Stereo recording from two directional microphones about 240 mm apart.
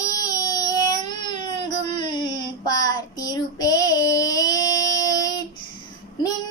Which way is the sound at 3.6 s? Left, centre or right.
Centre.